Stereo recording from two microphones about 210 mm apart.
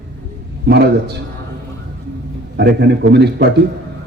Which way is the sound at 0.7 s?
50° right (ahead or behind).